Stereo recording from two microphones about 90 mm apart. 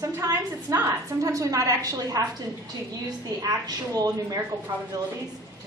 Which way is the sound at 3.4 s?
45° right (ahead or behind).